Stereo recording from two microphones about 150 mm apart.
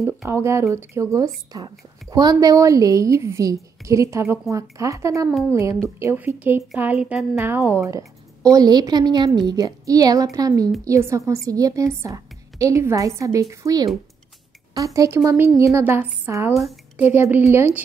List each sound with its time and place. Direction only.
0.3 s a woman's voice: 20° right (ahead or behind)